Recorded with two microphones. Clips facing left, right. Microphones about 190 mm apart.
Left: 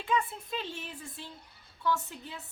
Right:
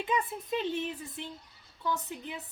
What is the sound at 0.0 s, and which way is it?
A woman's voice, 20° right (ahead or behind).